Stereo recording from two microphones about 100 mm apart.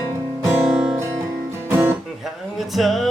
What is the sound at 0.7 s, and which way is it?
Music, 5° right (ahead or behind).